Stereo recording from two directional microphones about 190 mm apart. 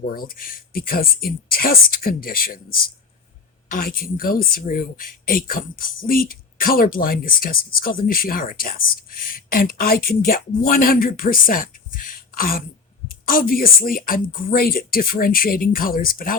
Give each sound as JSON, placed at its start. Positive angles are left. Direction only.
{"t": 0.1, "sound": "speech", "side_deg": 45}
{"t": 3.7, "sound": "speech", "side_deg": 50}